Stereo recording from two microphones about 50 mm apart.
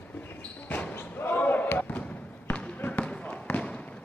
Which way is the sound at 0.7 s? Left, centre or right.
Left.